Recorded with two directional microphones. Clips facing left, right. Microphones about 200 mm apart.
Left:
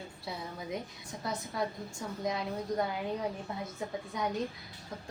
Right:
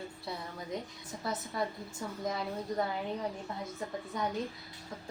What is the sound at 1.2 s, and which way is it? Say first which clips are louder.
A woman's voice: even; centre (ahead or behind).